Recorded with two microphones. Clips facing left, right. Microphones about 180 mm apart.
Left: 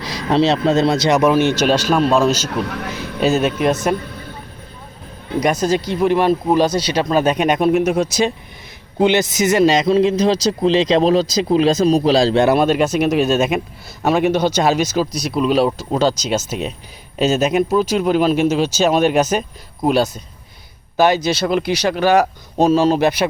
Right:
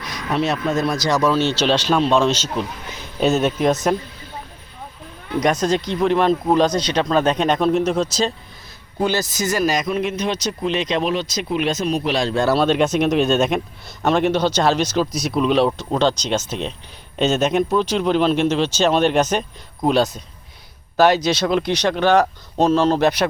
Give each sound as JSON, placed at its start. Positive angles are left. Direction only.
{"t": 0.0, "sound": "speech", "side_deg": 30}
{"t": 2.5, "sound": "speech", "side_deg": 70}
{"t": 3.2, "sound": "speech", "side_deg": 0}
{"t": 5.4, "sound": "speech", "side_deg": 5}
{"t": 12.4, "sound": "speech", "side_deg": 15}
{"t": 21.2, "sound": "speech", "side_deg": 0}